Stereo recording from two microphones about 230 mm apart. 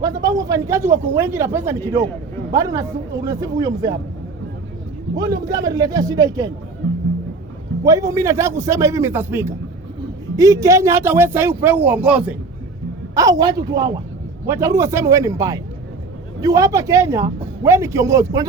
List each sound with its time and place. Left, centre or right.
0.0 s speech: centre
5.1 s speech: centre
7.9 s speech: centre
13.1 s speech: centre